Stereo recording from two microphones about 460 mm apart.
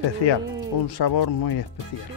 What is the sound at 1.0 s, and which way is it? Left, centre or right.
Speech, left.